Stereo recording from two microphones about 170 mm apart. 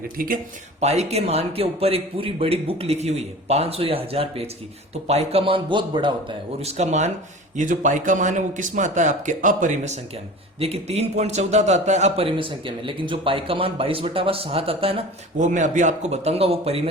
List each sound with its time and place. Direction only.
0.2 s speech: 55° right (ahead or behind)
0.8 s a man's voice: 40° right (ahead or behind)
6.6 s a man's voice: 40° right (ahead or behind)
15.4 s a man's voice: 45° right (ahead or behind)